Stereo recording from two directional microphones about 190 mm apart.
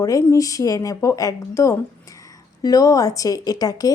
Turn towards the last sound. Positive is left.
turn(degrees=20)  # may be behind; listen again after turning